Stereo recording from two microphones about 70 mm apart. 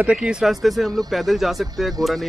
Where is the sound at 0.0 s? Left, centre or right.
Centre.